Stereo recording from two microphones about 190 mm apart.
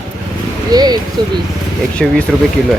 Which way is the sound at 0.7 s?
20° right (ahead or behind).